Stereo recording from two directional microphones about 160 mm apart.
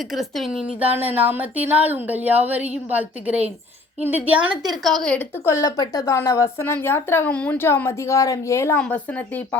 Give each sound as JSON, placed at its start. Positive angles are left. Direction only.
{"t": 0.1, "sound": "a woman's voice", "side_deg": 0}
{"t": 4.7, "sound": "a woman's voice", "side_deg": 0}
{"t": 5.5, "sound": "speech", "side_deg": 20}